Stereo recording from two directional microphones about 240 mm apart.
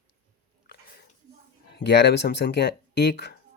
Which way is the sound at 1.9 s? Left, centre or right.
Left.